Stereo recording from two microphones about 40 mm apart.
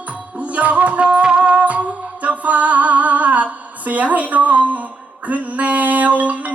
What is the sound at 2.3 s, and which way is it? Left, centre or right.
A capella, right.